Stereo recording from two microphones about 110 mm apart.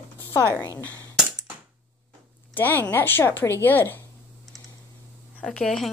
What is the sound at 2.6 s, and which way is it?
A woman's voice, 20° left (ahead or behind).